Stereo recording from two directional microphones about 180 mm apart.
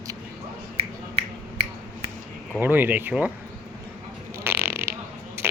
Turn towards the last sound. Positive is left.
turn(degrees=-15)  # may be behind; listen again after turning